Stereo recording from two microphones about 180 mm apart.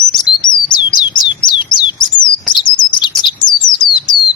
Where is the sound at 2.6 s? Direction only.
25° left (ahead or behind).